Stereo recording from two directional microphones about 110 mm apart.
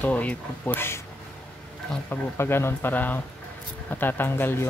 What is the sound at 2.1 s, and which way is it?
Speech, 20° left (ahead or behind).